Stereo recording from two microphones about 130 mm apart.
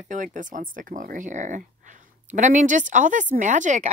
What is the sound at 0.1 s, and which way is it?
Speech, 80° right.